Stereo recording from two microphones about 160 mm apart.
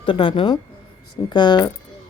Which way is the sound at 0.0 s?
30° left (ahead or behind).